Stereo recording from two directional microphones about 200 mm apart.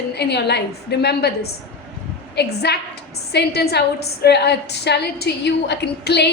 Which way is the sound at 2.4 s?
55° left (ahead or behind).